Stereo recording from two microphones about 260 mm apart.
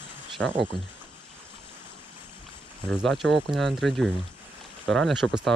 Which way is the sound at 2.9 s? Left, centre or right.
Centre.